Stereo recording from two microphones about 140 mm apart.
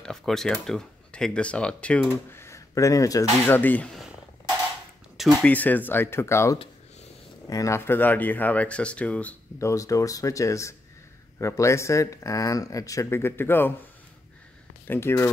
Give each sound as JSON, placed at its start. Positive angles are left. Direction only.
{"t": 0.0, "sound": "speech", "side_deg": 5}
{"t": 5.4, "sound": "speech", "side_deg": 10}
{"t": 9.6, "sound": "speech", "side_deg": 20}
{"t": 14.9, "sound": "speech", "side_deg": 15}